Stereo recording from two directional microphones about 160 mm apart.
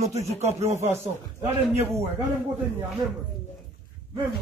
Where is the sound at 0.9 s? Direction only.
15° right (ahead or behind).